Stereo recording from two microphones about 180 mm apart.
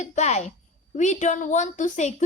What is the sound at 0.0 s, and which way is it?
A woman's voice, 40° left (ahead or behind).